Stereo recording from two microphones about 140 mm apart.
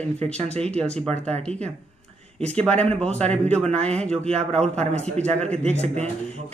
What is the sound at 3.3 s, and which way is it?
Speech, 10° left (ahead or behind).